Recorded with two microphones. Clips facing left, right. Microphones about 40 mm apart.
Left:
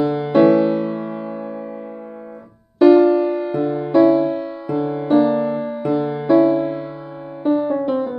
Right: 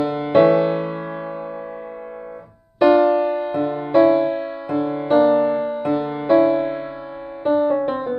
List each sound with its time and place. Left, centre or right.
0.0 s music: right
2.8 s music: right